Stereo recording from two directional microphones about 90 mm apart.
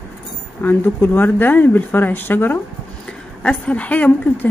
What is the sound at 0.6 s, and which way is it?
A woman's voice, 20° left (ahead or behind).